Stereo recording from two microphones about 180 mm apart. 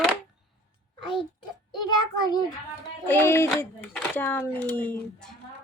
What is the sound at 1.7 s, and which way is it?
A child's voice, 25° left (ahead or behind).